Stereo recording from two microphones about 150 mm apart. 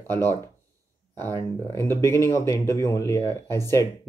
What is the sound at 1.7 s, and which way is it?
Speech, 20° left (ahead or behind).